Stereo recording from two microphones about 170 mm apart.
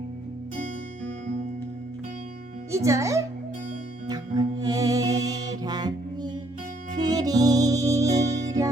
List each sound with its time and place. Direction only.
2.7 s speech: 20° right (ahead or behind)
4.0 s music: 25° right (ahead or behind)